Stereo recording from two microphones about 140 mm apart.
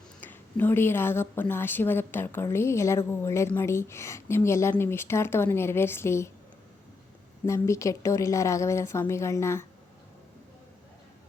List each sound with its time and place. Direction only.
0.2 s speech: 15° left (ahead or behind)
7.4 s speech: 20° left (ahead or behind)